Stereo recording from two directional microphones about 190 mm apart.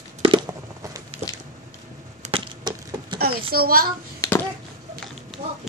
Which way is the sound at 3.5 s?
50° right (ahead or behind).